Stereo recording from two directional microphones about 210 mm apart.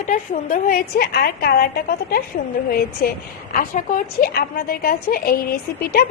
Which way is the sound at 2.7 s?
45° left (ahead or behind).